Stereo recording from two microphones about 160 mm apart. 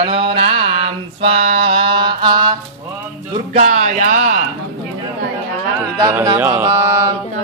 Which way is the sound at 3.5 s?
45° right (ahead or behind).